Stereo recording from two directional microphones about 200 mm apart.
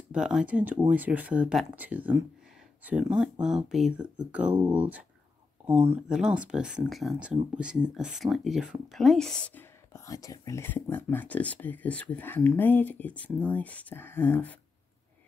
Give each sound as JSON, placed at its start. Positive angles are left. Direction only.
{"t": 0.1, "sound": "speech", "side_deg": -5}
{"t": 5.7, "sound": "speech", "side_deg": -30}
{"t": 6.0, "sound": "speech", "side_deg": -5}